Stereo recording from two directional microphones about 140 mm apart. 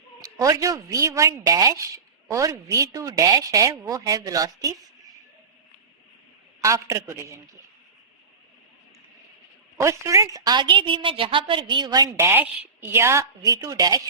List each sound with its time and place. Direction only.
0.2 s a woman's voice: 25° right (ahead or behind)
6.6 s a woman's voice: 20° right (ahead or behind)
9.7 s a woman's voice: 20° right (ahead or behind)